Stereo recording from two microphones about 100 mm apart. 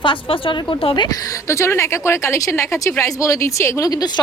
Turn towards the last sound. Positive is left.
turn(degrees=35)  # may be behind; listen again after turning